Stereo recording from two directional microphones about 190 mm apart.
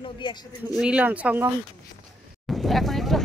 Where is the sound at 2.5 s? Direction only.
Centre (ahead or behind).